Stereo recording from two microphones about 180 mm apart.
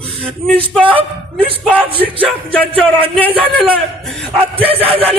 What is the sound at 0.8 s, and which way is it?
Speech, 30° right (ahead or behind).